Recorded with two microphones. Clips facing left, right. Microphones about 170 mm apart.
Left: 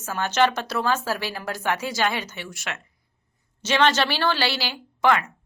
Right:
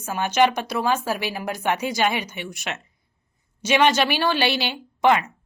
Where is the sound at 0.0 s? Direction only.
15° right (ahead or behind).